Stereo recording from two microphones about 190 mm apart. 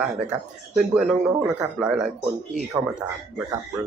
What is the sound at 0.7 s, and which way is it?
Speech, centre (ahead or behind).